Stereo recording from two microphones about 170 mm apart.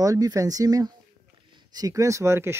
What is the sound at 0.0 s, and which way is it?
Speech, 20° right (ahead or behind).